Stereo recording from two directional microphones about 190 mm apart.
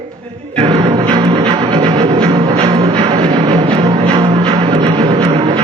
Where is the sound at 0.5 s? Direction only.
30° right (ahead or behind).